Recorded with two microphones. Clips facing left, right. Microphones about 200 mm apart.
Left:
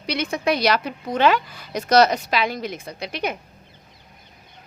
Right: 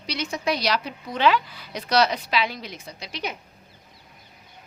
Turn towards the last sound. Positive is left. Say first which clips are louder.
# left 6 dB
turn(degrees=55)  # may be behind; listen again after turning